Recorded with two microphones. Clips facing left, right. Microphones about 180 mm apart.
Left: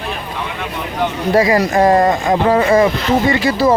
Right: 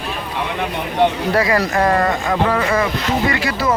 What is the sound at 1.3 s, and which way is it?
Speech, 20° left (ahead or behind).